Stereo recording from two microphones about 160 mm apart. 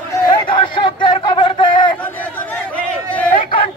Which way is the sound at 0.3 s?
30° left (ahead or behind).